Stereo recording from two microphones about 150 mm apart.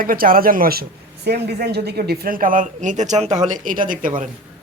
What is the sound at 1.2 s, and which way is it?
A woman's voice, 90° right.